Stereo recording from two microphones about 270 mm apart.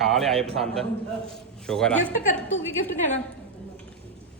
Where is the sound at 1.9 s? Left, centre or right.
Left.